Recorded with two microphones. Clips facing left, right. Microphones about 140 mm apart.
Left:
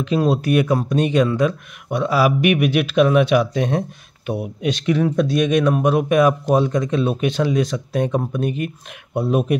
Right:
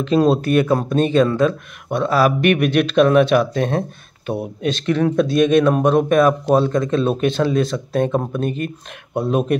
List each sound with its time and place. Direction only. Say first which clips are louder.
0.0 s speech: right 3 dB; 10° left (ahead or behind)